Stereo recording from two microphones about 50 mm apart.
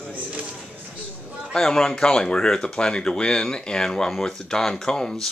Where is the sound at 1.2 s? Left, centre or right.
Right.